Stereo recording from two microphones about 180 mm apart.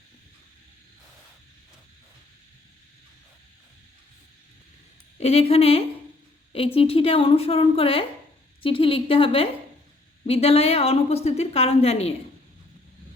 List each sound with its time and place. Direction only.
5.1 s a woman's voice: 35° left (ahead or behind)